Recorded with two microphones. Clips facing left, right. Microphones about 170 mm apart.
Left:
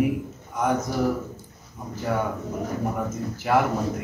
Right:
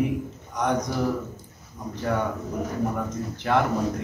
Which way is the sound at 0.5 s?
5° left (ahead or behind).